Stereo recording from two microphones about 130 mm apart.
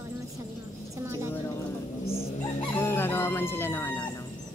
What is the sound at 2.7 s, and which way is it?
Chicken, 15° left (ahead or behind).